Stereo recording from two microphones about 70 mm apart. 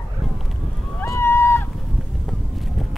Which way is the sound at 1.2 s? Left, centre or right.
Left.